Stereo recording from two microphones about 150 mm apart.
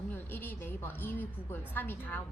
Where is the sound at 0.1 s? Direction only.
15° left (ahead or behind).